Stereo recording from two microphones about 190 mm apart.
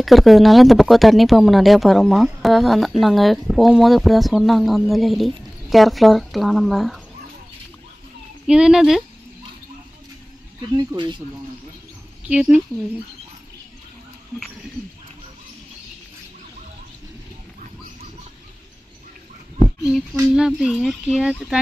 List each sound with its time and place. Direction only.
0.0 s speech: centre (ahead or behind)
8.5 s speech: 5° right (ahead or behind)
10.8 s speech: 25° right (ahead or behind)
12.3 s speech: 5° right (ahead or behind)
19.9 s speech: 5° right (ahead or behind)